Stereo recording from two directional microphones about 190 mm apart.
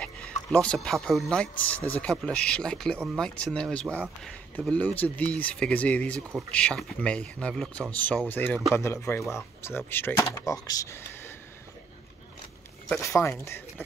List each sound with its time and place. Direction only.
0.0 s a sound: 5° left (ahead or behind)
1.6 s speech: 10° left (ahead or behind)
13.0 s speech: 15° left (ahead or behind)